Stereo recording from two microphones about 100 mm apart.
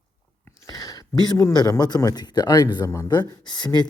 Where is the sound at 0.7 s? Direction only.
40° left (ahead or behind).